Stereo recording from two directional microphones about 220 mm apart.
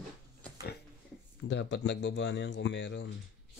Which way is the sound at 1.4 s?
55° left (ahead or behind).